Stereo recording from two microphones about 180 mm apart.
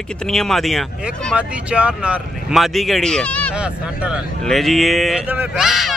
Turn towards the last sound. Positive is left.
turn(degrees=0)  # may be behind; listen again after turning